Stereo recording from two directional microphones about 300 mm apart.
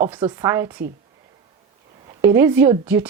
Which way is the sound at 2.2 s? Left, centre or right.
Centre.